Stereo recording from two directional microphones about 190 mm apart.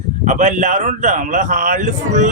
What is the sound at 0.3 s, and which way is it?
A man's voice, 40° right (ahead or behind).